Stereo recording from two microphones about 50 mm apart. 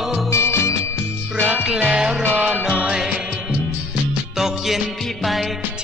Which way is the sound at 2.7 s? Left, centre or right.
Centre.